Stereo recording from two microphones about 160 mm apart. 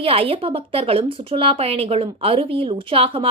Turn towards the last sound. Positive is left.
turn(degrees=-35)  # may be behind; listen again after turning